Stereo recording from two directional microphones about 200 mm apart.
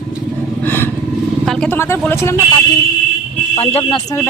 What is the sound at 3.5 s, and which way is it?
Speech, 30° left (ahead or behind).